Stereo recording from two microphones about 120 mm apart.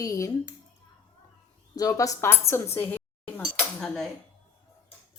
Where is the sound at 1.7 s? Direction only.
30° left (ahead or behind).